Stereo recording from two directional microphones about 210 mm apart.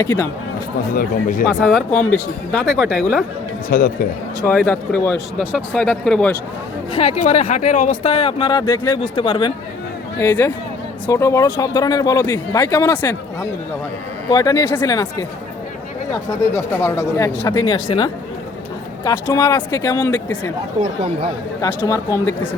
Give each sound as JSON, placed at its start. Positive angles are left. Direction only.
{"t": 0.0, "sound": "speech", "side_deg": 15}
{"t": 0.9, "sound": "speech", "side_deg": 40}
{"t": 1.5, "sound": "speech", "side_deg": 0}
{"t": 3.7, "sound": "speech", "side_deg": 45}
{"t": 4.4, "sound": "speech", "side_deg": 10}
{"t": 6.9, "sound": "speech", "side_deg": 30}
{"t": 10.2, "sound": "speech", "side_deg": 10}
{"t": 16.5, "sound": "speech", "side_deg": 10}
{"t": 20.8, "sound": "speech", "side_deg": -20}
{"t": 21.8, "sound": "speech", "side_deg": 15}